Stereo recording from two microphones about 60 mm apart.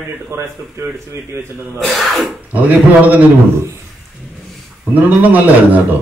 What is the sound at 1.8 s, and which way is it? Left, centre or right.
Speech, centre.